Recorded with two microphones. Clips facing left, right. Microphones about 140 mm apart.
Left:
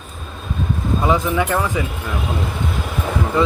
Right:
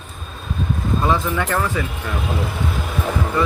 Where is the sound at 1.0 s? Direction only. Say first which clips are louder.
Left 3 dB; 15° left (ahead or behind).